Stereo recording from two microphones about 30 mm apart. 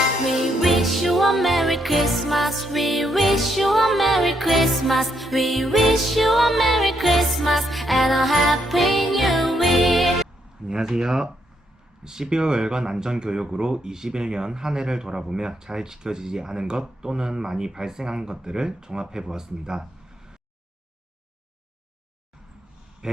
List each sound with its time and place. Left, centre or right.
0.3 s music: centre
10.6 s speech: right
23.0 s a sound: right